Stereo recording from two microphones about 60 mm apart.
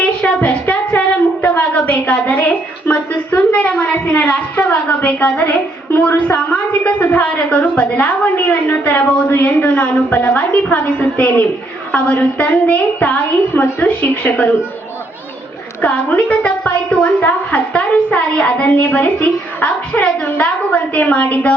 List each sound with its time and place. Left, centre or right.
0.7 s a sound: left
4.9 s a woman's voice: left
15.8 s a woman's voice: left